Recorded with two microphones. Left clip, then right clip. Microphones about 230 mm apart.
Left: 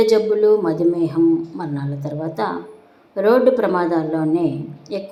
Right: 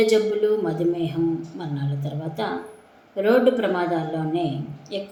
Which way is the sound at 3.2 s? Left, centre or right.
Centre.